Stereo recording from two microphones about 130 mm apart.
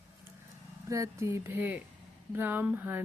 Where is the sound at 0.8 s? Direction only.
25° right (ahead or behind).